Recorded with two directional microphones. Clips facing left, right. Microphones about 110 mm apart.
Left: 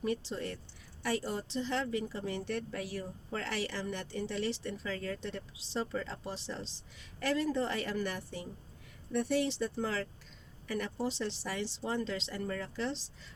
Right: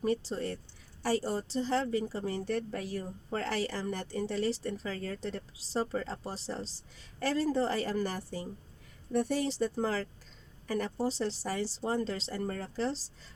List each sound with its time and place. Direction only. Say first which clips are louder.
0.0 s speech: right 4 dB; 40° right (ahead or behind)